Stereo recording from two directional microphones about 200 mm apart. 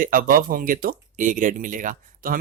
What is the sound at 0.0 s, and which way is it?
Speech, 45° right (ahead or behind).